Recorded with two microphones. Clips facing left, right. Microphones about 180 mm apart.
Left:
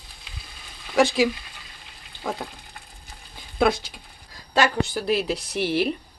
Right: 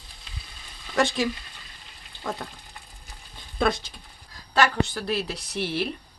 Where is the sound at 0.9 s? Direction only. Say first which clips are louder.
Left 5 dB; 5° left (ahead or behind).